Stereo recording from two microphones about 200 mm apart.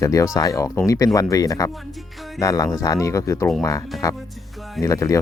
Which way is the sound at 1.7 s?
Centre (ahead or behind).